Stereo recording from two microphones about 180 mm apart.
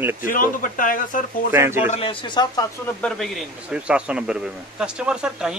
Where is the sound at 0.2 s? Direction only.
50° left (ahead or behind).